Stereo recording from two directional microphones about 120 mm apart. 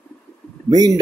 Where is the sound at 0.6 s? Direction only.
30° right (ahead or behind).